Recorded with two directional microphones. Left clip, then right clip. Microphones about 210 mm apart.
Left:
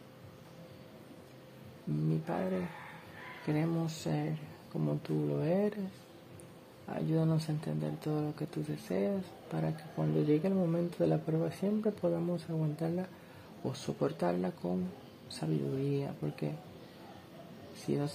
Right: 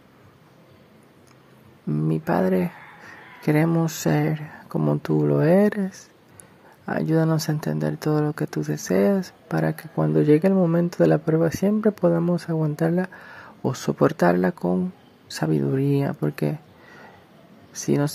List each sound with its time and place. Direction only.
2.0 s speech: 35° right (ahead or behind)
6.9 s speech: 30° right (ahead or behind)
17.8 s speech: 35° right (ahead or behind)